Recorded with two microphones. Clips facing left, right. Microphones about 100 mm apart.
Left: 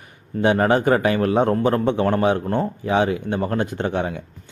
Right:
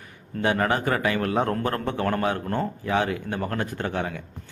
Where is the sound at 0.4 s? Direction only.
30° left (ahead or behind).